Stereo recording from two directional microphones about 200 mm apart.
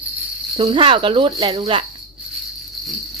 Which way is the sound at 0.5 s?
25° right (ahead or behind).